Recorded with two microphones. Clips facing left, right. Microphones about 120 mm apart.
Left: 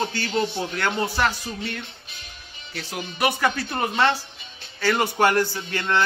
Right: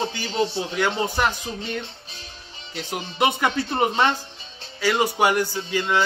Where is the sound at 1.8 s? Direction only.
30° right (ahead or behind).